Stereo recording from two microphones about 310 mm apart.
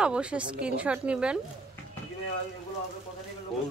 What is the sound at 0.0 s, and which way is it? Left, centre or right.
A man's voice, centre.